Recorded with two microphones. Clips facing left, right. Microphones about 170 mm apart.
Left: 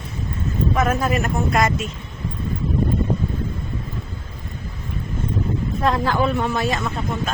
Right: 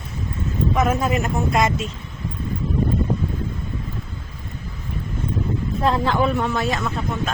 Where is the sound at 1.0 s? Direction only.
20° right (ahead or behind).